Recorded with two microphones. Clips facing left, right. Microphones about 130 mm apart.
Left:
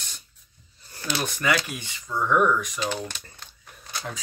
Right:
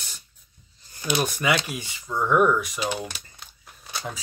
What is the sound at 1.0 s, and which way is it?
Speech, 10° right (ahead or behind).